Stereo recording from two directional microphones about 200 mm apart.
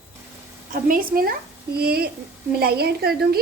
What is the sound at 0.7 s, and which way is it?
A woman's voice, 45° right (ahead or behind).